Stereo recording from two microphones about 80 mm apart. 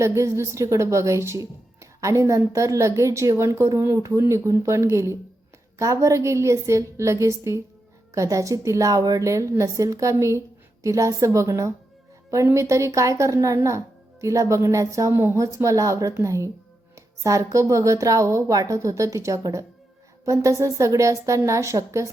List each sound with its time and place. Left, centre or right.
0.0 s speech: right
15.5 s a woman's voice: right